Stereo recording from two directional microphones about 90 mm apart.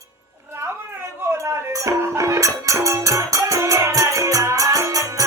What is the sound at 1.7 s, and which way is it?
Music, 35° right (ahead or behind).